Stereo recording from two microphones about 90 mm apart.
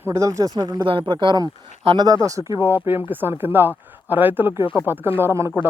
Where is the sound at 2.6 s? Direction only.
25° right (ahead or behind).